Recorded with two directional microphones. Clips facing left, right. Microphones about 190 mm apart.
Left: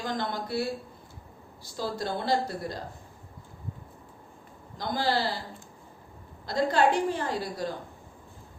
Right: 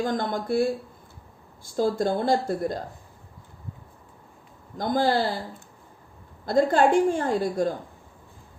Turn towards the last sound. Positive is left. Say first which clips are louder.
# right 7 dB
turn(degrees=-50)  # may be behind; listen again after turning